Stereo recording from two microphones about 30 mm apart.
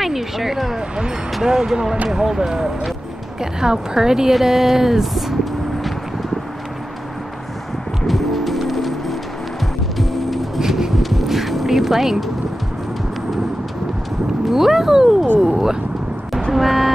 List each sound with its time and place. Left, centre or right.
0.0 s speech: centre
0.7 s a woman's voice: right
4.3 s speech: centre
5.1 s vehicle: centre
8.1 s music: centre
11.0 s vehicle: centre
14.4 s speech: centre
16.5 s speech: centre